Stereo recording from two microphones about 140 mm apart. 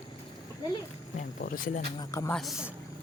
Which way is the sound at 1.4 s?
90° left.